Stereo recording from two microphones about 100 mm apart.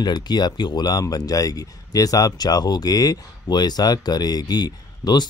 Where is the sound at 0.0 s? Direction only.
45° left (ahead or behind).